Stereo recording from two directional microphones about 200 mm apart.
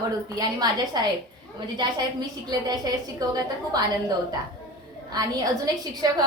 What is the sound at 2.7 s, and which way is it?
A woman's voice, 20° right (ahead or behind).